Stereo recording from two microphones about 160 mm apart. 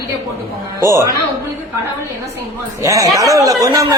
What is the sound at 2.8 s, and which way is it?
Speech, 20° right (ahead or behind).